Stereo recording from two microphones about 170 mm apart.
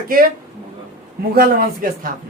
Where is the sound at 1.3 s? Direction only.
55° right (ahead or behind).